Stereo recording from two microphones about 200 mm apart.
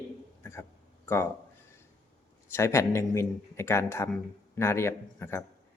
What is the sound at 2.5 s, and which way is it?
Speech, 15° left (ahead or behind).